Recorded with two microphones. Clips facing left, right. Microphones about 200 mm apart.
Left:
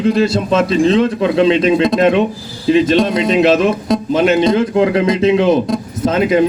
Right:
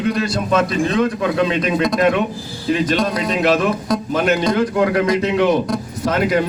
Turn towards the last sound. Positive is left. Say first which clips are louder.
# left 4 dB
turn(degrees=25)  # may be behind; listen again after turning